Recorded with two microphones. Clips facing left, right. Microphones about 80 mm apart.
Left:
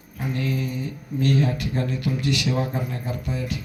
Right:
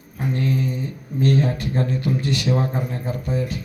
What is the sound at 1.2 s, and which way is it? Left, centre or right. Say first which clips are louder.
A man's voice: right 2 dB; right.